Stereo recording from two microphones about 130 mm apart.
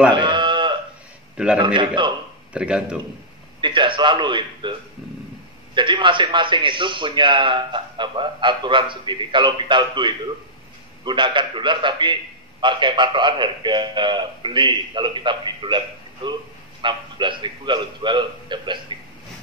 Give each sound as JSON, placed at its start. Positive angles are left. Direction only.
{"t": 0.1, "sound": "a sound", "side_deg": -35}
{"t": 1.3, "sound": "a man's voice", "side_deg": -10}
{"t": 1.6, "sound": "a man's voice", "side_deg": -35}
{"t": 2.5, "sound": "a man's voice", "side_deg": -10}
{"t": 3.6, "sound": "a man's voice", "side_deg": -40}
{"t": 5.8, "sound": "a man's voice", "side_deg": -35}
{"t": 16.8, "sound": "a man's voice", "side_deg": -40}